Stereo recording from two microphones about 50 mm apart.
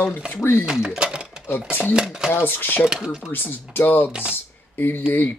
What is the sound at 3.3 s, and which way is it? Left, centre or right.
Speech, left.